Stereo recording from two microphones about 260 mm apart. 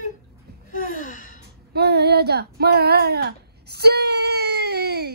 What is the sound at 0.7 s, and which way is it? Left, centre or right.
Speech, left.